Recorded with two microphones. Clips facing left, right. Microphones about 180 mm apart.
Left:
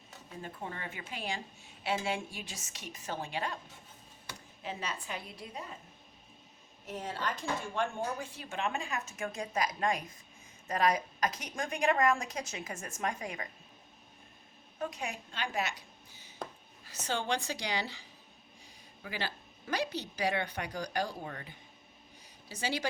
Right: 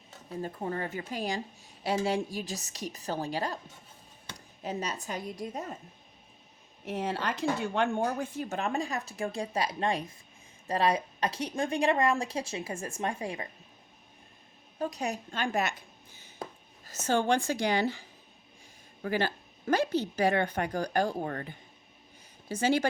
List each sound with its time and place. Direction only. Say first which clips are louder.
0.3 s a woman's voice: right 8 dB; 40° right (ahead or behind)
6.8 s a woman's voice: right 5 dB; 70° right (ahead or behind); by 13.5 s 30° right (ahead or behind)
14.8 s a woman's voice: right 5 dB; 40° right (ahead or behind)
16.8 s a woman's voice: right 8 dB; 45° right (ahead or behind)
19.0 s a woman's voice: right 9 dB; 45° right (ahead or behind)